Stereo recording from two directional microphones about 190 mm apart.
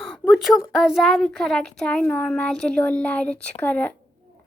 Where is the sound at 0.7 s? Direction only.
Centre (ahead or behind).